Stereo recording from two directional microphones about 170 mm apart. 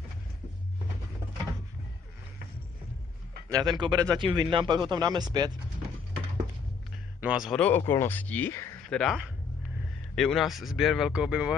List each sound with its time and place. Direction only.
3.4 s speech: 25° right (ahead or behind)
7.2 s speech: 5° right (ahead or behind)
7.5 s speech: 10° left (ahead or behind)
8.8 s speech: centre (ahead or behind)